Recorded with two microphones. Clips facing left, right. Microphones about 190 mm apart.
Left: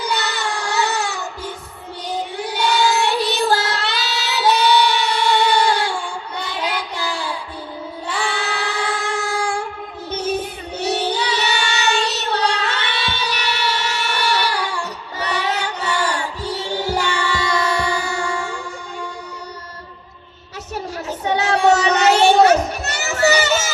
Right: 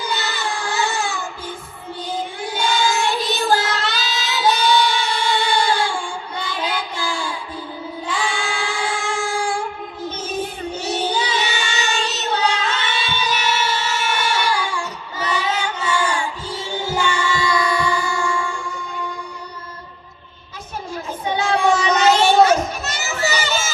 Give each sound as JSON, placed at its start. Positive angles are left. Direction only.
{"t": 0.1, "sound": "music", "side_deg": 70}
{"t": 2.0, "sound": "child singing", "side_deg": 70}
{"t": 10.8, "sound": "child singing", "side_deg": 65}
{"t": 15.3, "sound": "music", "side_deg": 65}
{"t": 21.2, "sound": "child singing", "side_deg": 75}
{"t": 21.8, "sound": "children playing", "side_deg": 65}